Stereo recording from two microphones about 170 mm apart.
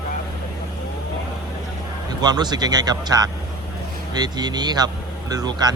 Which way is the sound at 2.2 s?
25° right (ahead or behind).